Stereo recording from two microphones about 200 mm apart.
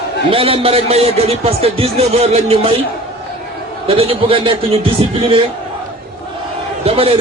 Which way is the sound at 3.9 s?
30° right (ahead or behind).